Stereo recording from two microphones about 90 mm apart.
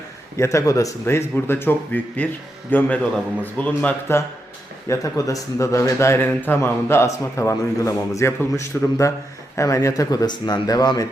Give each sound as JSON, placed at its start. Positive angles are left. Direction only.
{"t": 0.3, "sound": "a man's voice", "side_deg": 35}
{"t": 1.0, "sound": "speech", "side_deg": 25}
{"t": 4.9, "sound": "a man's voice", "side_deg": 40}